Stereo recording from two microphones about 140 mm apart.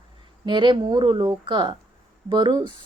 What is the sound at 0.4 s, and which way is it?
A woman's voice, 35° right (ahead or behind).